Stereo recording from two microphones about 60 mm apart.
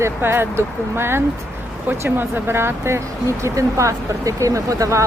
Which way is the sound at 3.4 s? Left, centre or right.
Right.